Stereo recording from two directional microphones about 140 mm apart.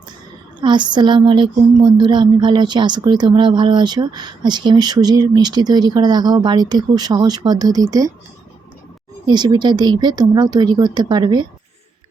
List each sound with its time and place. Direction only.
0.6 s speech: 35° right (ahead or behind)
9.2 s speech: 30° right (ahead or behind)